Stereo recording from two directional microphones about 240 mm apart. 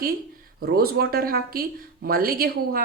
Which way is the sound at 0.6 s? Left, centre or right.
Right.